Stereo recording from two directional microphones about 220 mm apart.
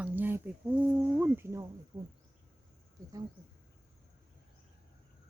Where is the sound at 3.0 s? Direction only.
15° right (ahead or behind).